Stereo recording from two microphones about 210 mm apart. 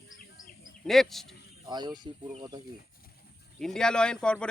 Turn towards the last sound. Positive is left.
turn(degrees=5)  # may be behind; listen again after turning